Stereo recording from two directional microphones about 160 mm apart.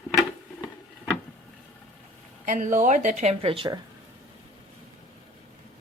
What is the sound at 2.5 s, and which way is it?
Speech, 55° right (ahead or behind).